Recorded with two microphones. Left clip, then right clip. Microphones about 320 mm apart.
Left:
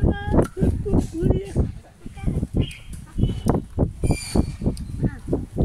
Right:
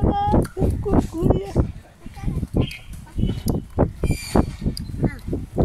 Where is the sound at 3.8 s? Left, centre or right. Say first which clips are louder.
Right 5 dB; right.